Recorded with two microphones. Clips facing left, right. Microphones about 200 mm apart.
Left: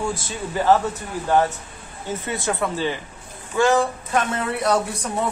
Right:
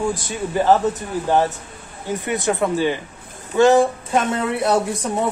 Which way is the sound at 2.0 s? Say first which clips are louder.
Right 4 dB; 15° right (ahead or behind).